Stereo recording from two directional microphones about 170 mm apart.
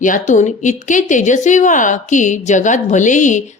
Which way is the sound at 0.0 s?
50° left (ahead or behind).